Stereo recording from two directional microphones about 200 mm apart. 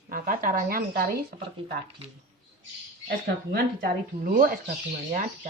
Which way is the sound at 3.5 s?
45° right (ahead or behind).